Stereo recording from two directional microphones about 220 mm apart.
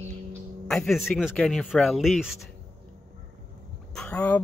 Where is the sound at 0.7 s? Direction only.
Centre (ahead or behind).